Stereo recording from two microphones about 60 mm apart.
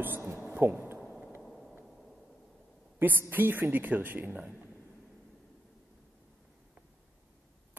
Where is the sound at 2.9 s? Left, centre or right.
Right.